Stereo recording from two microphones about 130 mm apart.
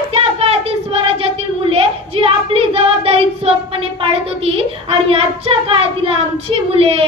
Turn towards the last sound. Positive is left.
turn(degrees=-50)  # may be behind; listen again after turning